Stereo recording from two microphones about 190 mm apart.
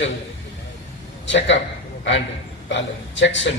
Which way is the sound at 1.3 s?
70° left (ahead or behind).